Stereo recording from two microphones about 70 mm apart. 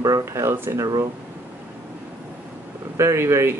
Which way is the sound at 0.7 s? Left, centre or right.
Right.